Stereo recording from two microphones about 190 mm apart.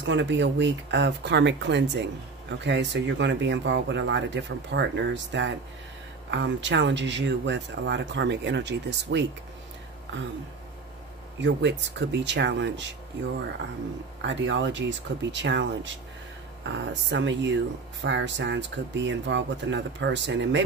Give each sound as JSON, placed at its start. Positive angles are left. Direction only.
{"t": 0.0, "sound": "speech", "side_deg": -70}
{"t": 11.4, "sound": "speech", "side_deg": -65}
{"t": 14.2, "sound": "speech", "side_deg": -70}